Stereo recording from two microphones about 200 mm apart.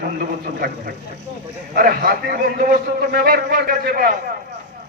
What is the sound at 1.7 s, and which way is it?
A man's voice, 45° right (ahead or behind).